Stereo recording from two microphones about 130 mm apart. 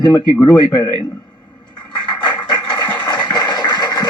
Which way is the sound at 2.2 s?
35° left (ahead or behind).